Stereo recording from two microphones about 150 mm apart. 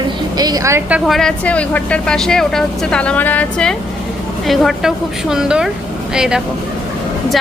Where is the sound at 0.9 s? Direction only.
Centre (ahead or behind).